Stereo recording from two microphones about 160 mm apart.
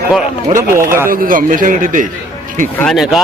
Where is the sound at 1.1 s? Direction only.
60° right (ahead or behind).